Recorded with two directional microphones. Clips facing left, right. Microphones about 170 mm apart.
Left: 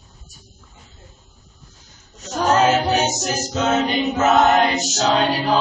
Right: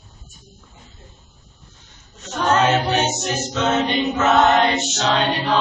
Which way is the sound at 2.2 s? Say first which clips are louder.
Left 1 dB; 40° left (ahead or behind).